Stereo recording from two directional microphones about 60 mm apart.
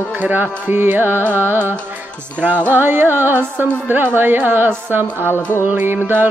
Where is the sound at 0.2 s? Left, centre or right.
Right.